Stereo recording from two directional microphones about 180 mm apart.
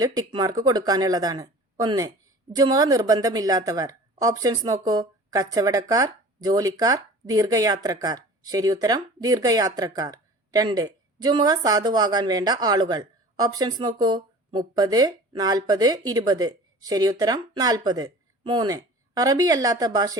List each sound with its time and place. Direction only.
0.0 s speech: 20° right (ahead or behind)